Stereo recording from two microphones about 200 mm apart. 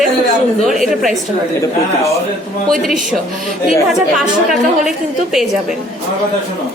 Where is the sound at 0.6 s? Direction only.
Centre (ahead or behind).